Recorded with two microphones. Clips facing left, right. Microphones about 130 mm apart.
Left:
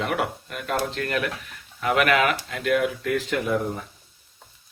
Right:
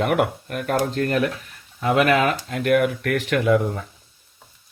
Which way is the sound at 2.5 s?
45° right (ahead or behind).